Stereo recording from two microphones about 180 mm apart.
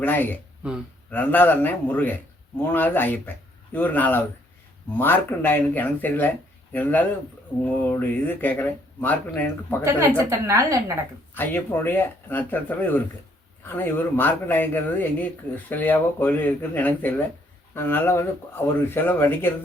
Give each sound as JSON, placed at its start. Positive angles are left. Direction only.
{"t": 0.0, "sound": "speech", "side_deg": 10}
{"t": 9.8, "sound": "a woman's voice", "side_deg": -15}
{"t": 11.3, "sound": "speech", "side_deg": 10}